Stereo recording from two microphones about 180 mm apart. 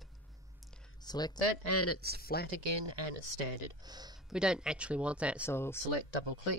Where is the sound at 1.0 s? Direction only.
20° left (ahead or behind).